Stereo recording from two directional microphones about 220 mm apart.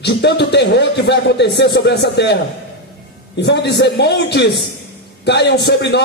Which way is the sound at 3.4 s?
50° left (ahead or behind).